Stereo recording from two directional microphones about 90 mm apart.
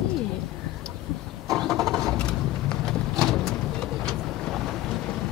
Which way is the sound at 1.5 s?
5° left (ahead or behind).